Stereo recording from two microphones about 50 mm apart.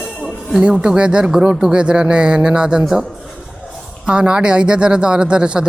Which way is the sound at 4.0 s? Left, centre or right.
Centre.